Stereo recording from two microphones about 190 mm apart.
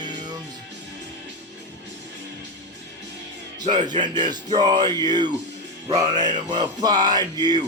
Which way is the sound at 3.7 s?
25° right (ahead or behind).